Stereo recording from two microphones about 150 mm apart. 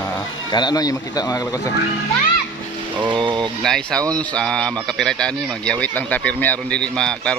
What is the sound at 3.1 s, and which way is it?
Speech, 30° right (ahead or behind).